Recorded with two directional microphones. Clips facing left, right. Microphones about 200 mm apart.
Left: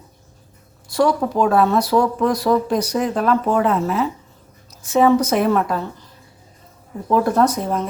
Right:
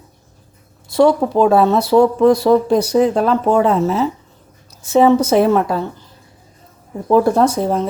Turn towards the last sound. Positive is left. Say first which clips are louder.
# right 3 dB
turn(degrees=-30)  # may be behind; listen again after turning